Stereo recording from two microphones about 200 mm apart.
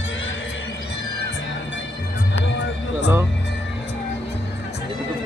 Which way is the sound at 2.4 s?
60° left (ahead or behind).